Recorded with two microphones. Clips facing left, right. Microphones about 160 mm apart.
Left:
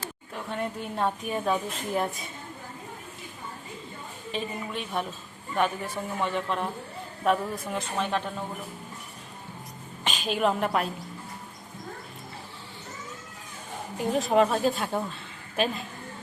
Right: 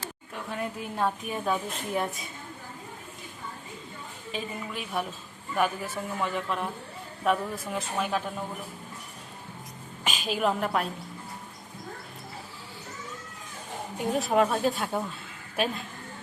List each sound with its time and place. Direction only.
0.3 s a woman's voice: centre (ahead or behind)
4.3 s a woman's voice: centre (ahead or behind)
10.2 s a woman's voice: centre (ahead or behind)
14.0 s a woman's voice: centre (ahead or behind)